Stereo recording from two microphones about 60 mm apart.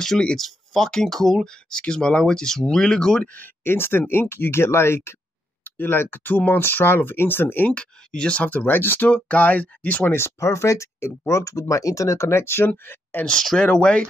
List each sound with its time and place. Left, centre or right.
0.0 s speech: centre
3.3 s speech: left
7.7 s speech: centre
10.1 s speech: left
13.3 s speech: centre